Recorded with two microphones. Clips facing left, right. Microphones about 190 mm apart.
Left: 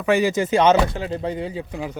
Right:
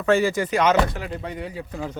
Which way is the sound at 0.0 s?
15° left (ahead or behind).